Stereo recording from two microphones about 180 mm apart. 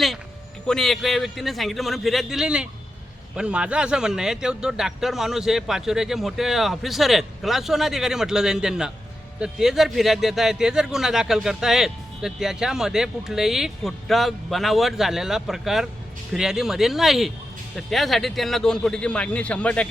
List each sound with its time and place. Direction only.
0.7 s speech: centre (ahead or behind)